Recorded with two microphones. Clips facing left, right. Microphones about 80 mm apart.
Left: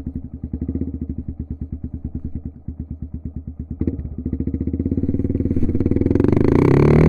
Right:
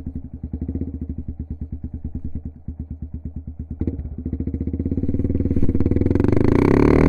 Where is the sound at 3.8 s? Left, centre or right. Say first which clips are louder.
Left 3 dB; left.